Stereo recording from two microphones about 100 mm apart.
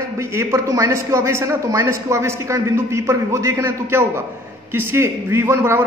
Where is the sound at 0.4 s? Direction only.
30° right (ahead or behind).